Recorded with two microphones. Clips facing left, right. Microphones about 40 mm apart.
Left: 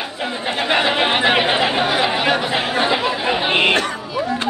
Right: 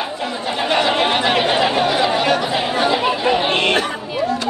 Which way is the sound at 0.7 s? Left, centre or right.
Centre.